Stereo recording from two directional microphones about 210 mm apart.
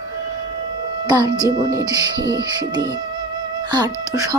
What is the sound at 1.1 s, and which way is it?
Speech, 20° right (ahead or behind).